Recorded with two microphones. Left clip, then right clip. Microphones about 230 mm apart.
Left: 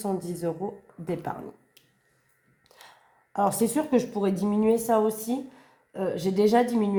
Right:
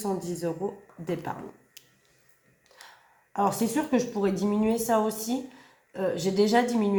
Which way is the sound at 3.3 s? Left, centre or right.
Left.